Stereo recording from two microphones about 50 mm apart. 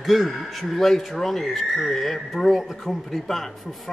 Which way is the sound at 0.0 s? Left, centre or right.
Centre.